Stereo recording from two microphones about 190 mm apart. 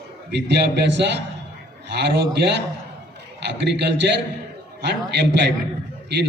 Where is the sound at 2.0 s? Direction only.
65° right (ahead or behind).